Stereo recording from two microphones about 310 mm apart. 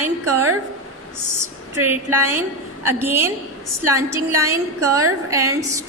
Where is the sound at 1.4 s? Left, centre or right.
Centre.